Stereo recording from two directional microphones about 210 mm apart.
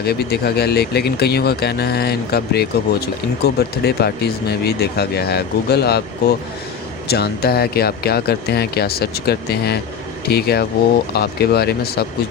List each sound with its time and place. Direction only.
0.0 s speech: 50° left (ahead or behind)
7.1 s speech: 50° left (ahead or behind)